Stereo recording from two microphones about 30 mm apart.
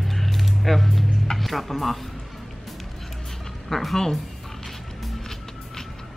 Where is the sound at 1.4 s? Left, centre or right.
Centre.